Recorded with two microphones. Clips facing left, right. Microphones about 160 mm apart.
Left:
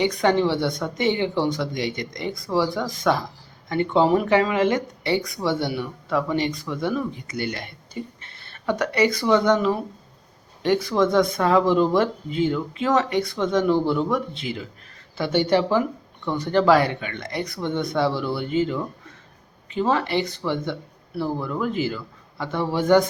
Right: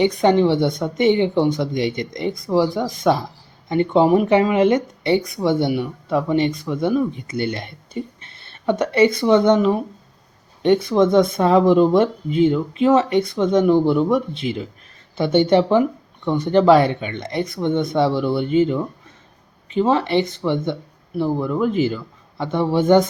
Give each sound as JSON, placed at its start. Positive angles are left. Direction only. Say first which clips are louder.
{"t": 0.0, "sound": "speech", "louder": "right 4 dB", "side_deg": -20}